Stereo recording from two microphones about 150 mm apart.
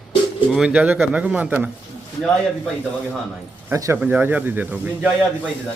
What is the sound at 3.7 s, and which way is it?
Speech, 15° right (ahead or behind).